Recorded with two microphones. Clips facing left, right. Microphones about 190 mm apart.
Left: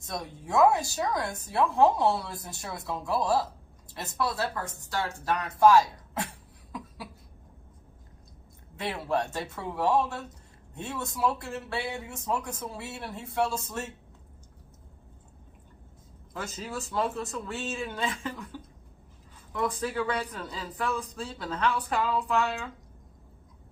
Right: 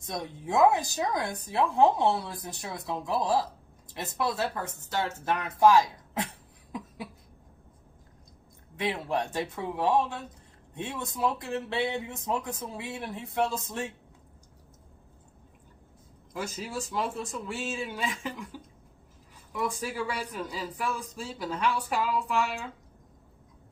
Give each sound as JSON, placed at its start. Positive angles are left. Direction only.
{"t": 0.1, "sound": "speech", "side_deg": -20}
{"t": 8.8, "sound": "speech", "side_deg": -15}
{"t": 16.3, "sound": "speech", "side_deg": -10}
{"t": 19.5, "sound": "speech", "side_deg": -10}